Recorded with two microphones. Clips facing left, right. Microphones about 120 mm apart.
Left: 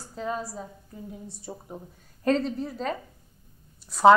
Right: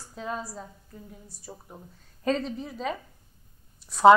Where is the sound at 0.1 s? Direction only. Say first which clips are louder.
Left 3 dB; centre (ahead or behind).